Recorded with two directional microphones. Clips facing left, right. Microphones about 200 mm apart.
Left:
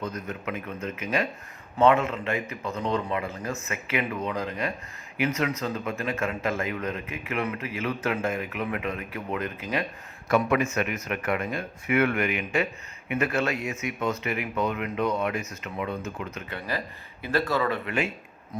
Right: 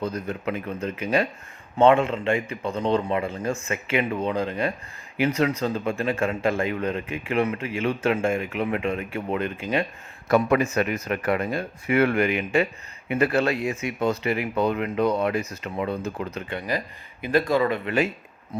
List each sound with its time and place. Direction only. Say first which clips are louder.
0.0 s speech: right 5 dB; 30° right (ahead or behind)
17.2 s speech: right 4 dB; 20° right (ahead or behind)
17.8 s speech: right 5 dB; 40° right (ahead or behind)